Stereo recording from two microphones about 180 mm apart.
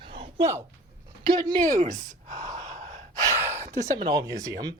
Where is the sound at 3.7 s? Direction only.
20° right (ahead or behind).